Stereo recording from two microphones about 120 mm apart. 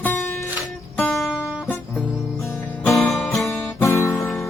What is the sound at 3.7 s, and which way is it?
Guitar, 25° left (ahead or behind).